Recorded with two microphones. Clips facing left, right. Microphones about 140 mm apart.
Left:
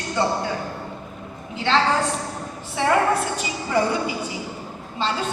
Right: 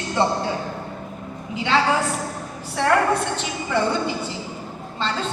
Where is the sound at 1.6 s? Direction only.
10° right (ahead or behind).